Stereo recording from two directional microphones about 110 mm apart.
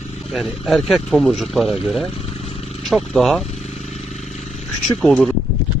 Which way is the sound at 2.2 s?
65° left (ahead or behind).